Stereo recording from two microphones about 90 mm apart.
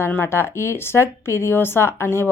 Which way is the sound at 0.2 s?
25° left (ahead or behind).